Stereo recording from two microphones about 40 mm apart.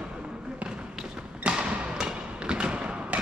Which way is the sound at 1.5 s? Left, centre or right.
Centre.